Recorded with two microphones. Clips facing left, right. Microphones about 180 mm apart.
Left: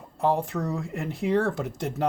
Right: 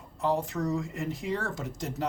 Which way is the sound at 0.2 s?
60° left (ahead or behind).